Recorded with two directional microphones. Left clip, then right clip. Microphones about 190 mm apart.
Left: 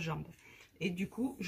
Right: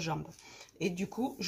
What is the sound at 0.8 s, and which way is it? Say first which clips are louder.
Speech: right 3 dB; 70° right (ahead or behind).